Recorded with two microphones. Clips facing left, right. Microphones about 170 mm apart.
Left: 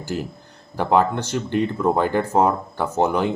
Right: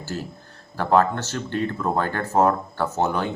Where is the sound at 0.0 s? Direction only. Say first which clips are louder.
Left 4 dB; 15° left (ahead or behind).